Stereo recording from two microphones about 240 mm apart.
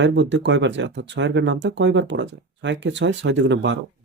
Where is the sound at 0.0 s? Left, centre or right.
Right.